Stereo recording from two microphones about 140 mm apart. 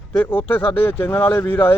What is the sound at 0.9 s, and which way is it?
Speech, 10° left (ahead or behind).